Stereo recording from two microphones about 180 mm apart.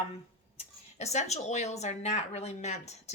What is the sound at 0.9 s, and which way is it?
A woman's voice, 40° left (ahead or behind).